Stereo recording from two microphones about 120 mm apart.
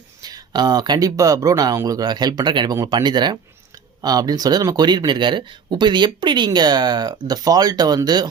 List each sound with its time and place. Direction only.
0.2 s speech: 35° right (ahead or behind)